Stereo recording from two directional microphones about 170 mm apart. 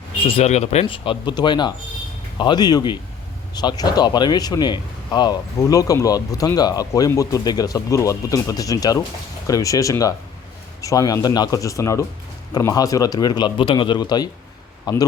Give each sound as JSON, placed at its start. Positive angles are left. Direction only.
{"t": 0.3, "sound": "speech", "side_deg": 35}